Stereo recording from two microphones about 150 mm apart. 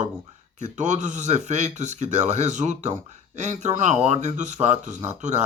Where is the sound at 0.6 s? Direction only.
55° right (ahead or behind).